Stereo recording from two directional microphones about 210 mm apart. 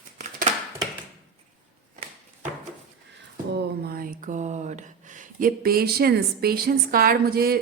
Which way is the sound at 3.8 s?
45° right (ahead or behind).